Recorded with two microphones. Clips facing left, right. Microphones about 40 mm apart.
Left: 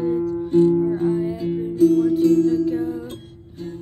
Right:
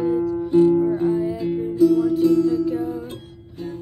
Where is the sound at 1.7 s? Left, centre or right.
Right.